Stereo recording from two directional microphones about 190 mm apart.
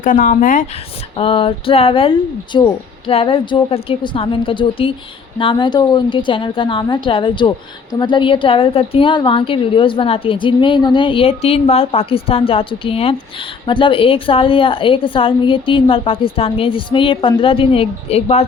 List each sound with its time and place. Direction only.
0.0 s speech: 45° left (ahead or behind)
1.1 s a woman's voice: 30° left (ahead or behind)